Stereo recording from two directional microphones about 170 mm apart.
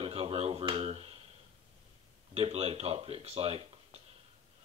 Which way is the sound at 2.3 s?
35° right (ahead or behind).